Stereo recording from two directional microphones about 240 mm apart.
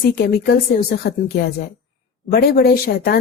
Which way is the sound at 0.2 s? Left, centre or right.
Left.